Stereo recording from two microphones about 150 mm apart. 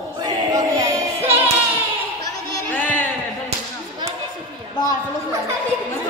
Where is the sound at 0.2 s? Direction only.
20° right (ahead or behind).